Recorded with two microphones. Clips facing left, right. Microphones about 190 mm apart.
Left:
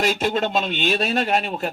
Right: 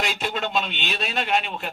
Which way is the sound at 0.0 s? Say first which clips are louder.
Left 6 dB; 45° left (ahead or behind).